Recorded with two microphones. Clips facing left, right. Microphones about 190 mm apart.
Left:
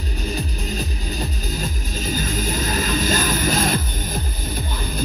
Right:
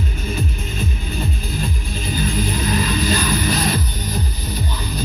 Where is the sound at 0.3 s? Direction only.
40° left (ahead or behind).